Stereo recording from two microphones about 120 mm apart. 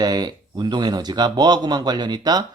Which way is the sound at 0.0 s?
35° right (ahead or behind).